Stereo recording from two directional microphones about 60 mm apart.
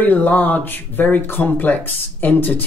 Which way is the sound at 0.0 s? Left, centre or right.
Left.